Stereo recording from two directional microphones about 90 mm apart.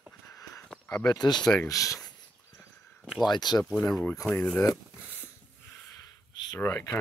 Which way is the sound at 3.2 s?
50° left (ahead or behind).